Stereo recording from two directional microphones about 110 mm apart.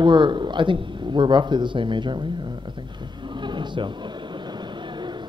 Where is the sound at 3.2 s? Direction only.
45° right (ahead or behind).